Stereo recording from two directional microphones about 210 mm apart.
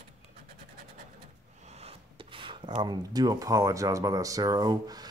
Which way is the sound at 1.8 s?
25° right (ahead or behind).